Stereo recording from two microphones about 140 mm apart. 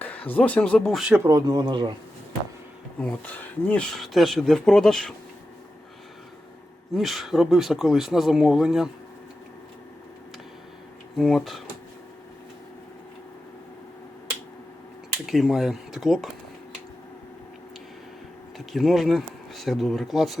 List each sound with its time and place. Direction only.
0.0 s speech: 10° left (ahead or behind)
1.2 s speech: 25° right (ahead or behind)
3.0 s speech: 10° left (ahead or behind)
6.9 s speech: centre (ahead or behind)
11.2 s speech: centre (ahead or behind)
15.3 s speech: centre (ahead or behind)
18.5 s speech: centre (ahead or behind)